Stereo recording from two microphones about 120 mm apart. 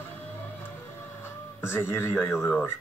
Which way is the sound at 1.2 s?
20° left (ahead or behind).